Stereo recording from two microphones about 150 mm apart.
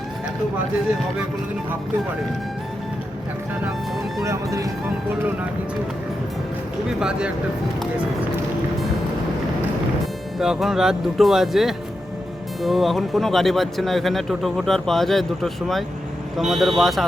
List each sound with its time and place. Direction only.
4.2 s speech: 20° right (ahead or behind)
7.0 s speech: 5° right (ahead or behind)
10.3 s speech: centre (ahead or behind)